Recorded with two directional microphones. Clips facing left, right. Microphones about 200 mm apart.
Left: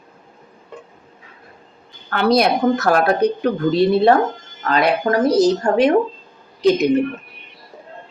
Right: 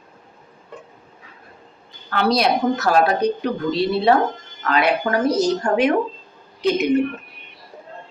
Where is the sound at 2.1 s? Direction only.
50° left (ahead or behind).